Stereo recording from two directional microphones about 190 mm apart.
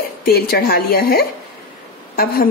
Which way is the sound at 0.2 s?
55° left (ahead or behind).